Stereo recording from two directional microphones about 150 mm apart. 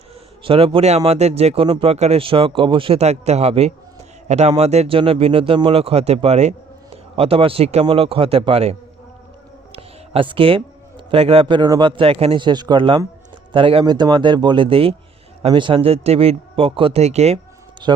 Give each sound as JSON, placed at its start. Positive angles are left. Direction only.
{"t": 0.4, "sound": "a man's voice", "side_deg": -40}
{"t": 9.7, "sound": "a man's voice", "side_deg": -40}
{"t": 17.8, "sound": "speech", "side_deg": -30}